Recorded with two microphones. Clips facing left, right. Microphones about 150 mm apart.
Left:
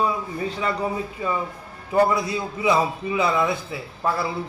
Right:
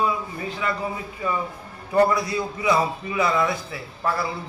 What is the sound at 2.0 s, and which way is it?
A man's voice, 15° left (ahead or behind).